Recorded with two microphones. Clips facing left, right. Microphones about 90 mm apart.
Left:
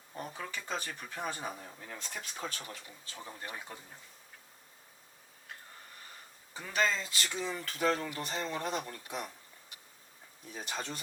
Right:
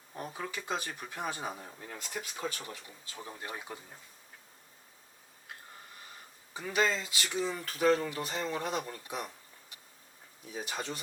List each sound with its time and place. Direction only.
0.1 s speech: 10° right (ahead or behind)
2.0 s speech: 5° right (ahead or behind)
6.5 s speech: 10° right (ahead or behind)
10.5 s speech: 5° right (ahead or behind)